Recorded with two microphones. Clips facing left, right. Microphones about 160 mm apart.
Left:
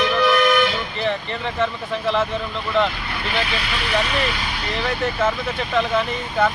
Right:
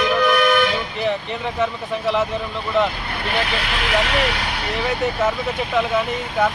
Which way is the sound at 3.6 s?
65° right (ahead or behind).